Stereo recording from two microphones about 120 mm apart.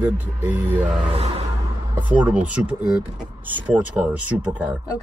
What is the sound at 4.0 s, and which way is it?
Speech, 15° right (ahead or behind).